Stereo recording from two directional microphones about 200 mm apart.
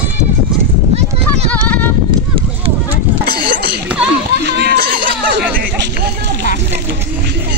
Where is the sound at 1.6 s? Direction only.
5° left (ahead or behind).